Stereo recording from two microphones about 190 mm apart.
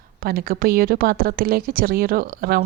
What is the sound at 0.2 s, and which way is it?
A woman's voice, 50° right (ahead or behind).